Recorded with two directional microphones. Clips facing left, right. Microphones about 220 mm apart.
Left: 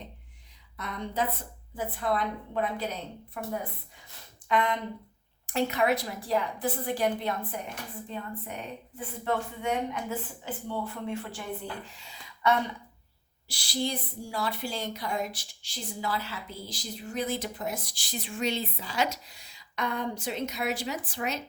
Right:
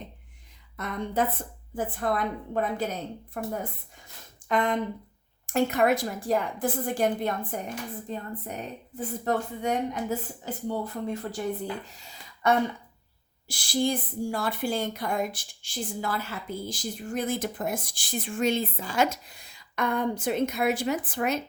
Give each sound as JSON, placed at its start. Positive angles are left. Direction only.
{"t": 0.8, "sound": "a woman's voice", "side_deg": -50}